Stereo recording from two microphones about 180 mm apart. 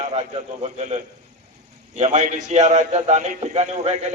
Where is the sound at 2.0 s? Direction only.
40° right (ahead or behind).